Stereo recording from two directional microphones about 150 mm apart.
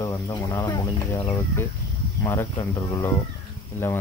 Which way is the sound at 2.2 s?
20° left (ahead or behind).